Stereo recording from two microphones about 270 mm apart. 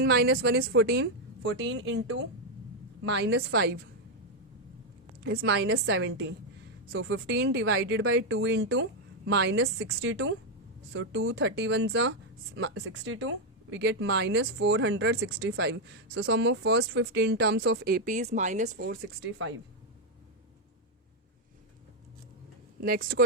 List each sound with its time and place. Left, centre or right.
0.0 s speech: right
5.2 s speech: right
22.8 s speech: right